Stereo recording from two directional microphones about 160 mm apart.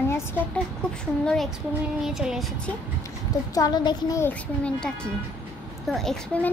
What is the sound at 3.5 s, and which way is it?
A child's voice, 25° left (ahead or behind).